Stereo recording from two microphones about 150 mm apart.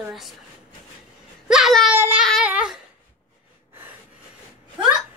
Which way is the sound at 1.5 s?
Centre (ahead or behind).